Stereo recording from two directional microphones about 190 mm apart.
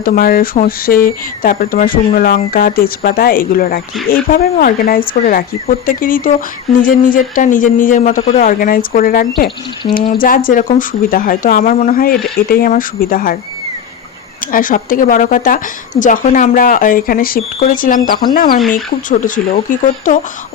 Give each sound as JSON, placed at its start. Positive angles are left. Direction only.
{"t": 0.0, "sound": "speech", "side_deg": 50}
{"t": 14.5, "sound": "speech", "side_deg": 45}